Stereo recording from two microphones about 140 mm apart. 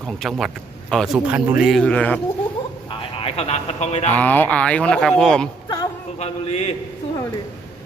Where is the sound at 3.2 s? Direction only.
45° left (ahead or behind).